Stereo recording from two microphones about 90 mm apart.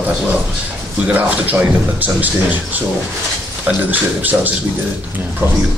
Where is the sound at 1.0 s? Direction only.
20° right (ahead or behind).